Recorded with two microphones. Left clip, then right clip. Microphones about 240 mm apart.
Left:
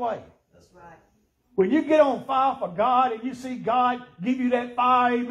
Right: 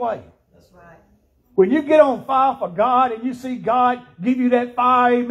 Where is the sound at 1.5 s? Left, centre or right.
Right.